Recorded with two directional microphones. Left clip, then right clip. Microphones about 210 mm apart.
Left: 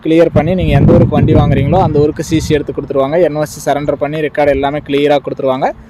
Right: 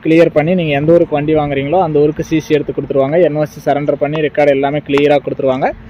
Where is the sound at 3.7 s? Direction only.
10° left (ahead or behind).